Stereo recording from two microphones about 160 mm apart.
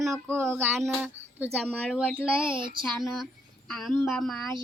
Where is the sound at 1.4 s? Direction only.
10° right (ahead or behind).